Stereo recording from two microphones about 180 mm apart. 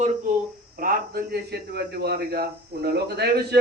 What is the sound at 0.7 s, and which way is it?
A man's voice, 55° right (ahead or behind).